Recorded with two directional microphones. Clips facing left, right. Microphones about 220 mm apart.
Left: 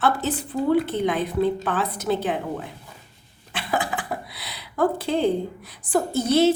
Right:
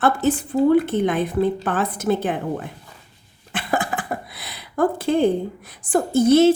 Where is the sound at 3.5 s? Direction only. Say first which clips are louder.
Right 2 dB; 50° right (ahead or behind).